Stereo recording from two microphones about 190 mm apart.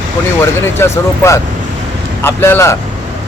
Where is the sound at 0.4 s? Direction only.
15° left (ahead or behind).